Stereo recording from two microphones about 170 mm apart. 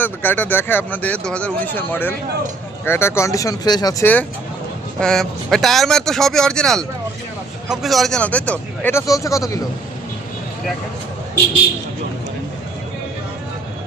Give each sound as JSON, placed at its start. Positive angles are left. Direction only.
{"t": 0.0, "sound": "speech", "side_deg": 10}